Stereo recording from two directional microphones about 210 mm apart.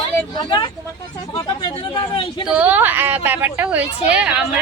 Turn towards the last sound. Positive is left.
turn(degrees=-5)  # may be behind; listen again after turning